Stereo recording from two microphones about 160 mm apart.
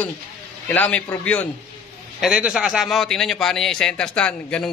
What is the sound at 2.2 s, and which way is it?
A man's voice, 5° right (ahead or behind).